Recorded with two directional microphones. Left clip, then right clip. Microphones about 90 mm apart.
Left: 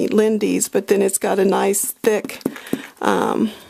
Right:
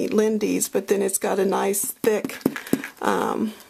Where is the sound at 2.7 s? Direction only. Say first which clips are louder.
Left 6 dB; 30° left (ahead or behind).